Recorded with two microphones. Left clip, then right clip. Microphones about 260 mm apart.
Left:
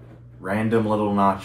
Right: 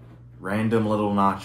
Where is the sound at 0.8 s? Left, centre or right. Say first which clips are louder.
Left 2 dB; centre.